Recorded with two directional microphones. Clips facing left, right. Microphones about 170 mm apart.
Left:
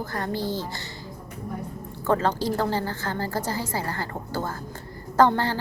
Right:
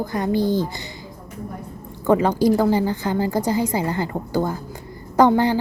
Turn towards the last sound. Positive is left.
turn(degrees=-15)  # may be behind; listen again after turning